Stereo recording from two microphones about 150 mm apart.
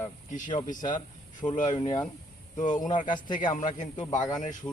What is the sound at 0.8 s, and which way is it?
Speech, 30° left (ahead or behind).